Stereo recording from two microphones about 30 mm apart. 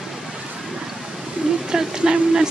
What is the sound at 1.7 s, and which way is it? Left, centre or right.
Speech, right.